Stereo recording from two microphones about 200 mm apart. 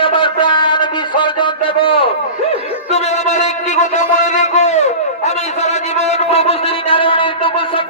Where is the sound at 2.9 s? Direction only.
35° left (ahead or behind).